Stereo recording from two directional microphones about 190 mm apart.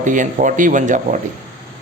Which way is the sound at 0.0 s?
40° right (ahead or behind).